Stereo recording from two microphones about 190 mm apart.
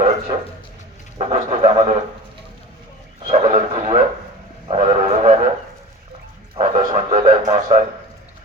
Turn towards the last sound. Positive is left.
turn(degrees=-40)  # may be behind; listen again after turning